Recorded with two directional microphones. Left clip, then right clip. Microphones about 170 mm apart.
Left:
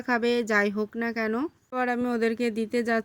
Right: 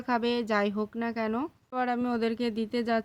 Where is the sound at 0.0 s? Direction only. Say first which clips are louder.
Left 3 dB; 15° left (ahead or behind).